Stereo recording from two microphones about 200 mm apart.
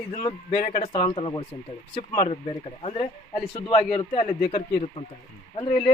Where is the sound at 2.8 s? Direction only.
30° left (ahead or behind).